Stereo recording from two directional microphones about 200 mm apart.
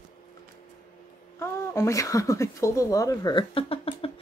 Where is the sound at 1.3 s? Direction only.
15° left (ahead or behind).